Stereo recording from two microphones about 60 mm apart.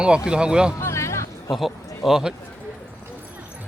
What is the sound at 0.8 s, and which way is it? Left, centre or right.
Music, left.